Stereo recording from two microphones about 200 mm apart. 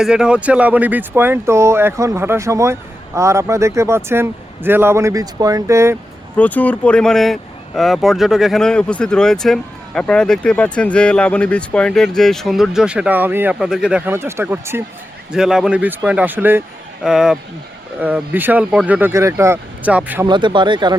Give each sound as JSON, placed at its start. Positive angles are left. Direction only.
{"t": 0.0, "sound": "speech", "side_deg": -5}
{"t": 6.3, "sound": "speech", "side_deg": 5}
{"t": 20.2, "sound": "speech", "side_deg": -25}